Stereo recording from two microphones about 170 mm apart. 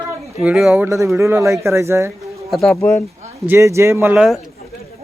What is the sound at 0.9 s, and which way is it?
A man's voice, 15° right (ahead or behind).